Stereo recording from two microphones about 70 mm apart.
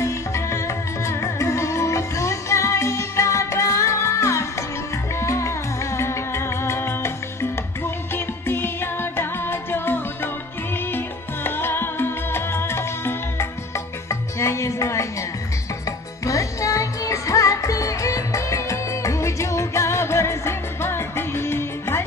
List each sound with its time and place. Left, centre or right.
0.0 s music: left
16.3 s music: left